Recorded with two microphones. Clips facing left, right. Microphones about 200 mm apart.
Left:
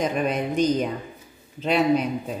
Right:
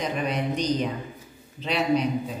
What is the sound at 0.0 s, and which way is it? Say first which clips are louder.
Speech: left 3 dB; 50° left (ahead or behind).